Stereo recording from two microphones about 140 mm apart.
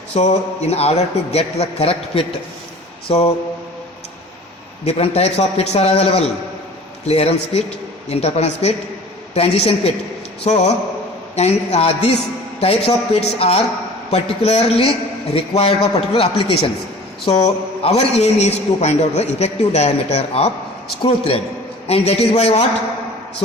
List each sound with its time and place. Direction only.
0.1 s a man's voice: 55° left (ahead or behind)
4.9 s a man's voice: 45° left (ahead or behind)